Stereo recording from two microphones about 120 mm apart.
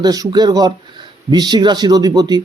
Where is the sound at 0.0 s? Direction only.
35° right (ahead or behind).